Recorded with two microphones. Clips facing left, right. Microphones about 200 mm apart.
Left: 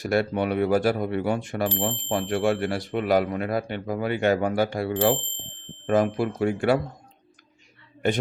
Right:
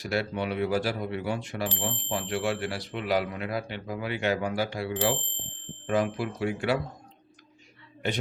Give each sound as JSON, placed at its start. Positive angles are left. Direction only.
{"t": 0.0, "sound": "speech", "side_deg": 50}
{"t": 8.0, "sound": "speech", "side_deg": 50}